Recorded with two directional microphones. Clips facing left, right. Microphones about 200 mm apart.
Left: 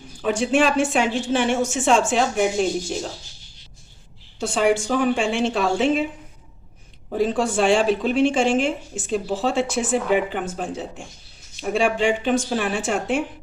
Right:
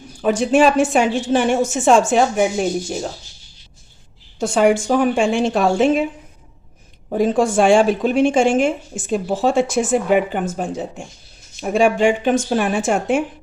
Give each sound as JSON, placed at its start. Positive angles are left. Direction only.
{"t": 0.2, "sound": "a woman's voice", "side_deg": -45}
{"t": 4.4, "sound": "a woman's voice", "side_deg": -45}
{"t": 7.2, "sound": "a woman's voice", "side_deg": -50}